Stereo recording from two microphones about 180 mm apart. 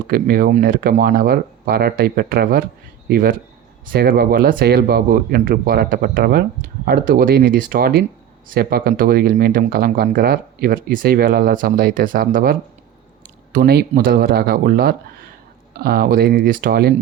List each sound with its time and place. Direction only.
0.1 s speech: 55° right (ahead or behind)